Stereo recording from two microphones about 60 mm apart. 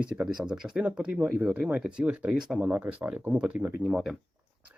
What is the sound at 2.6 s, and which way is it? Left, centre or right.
Speech, right.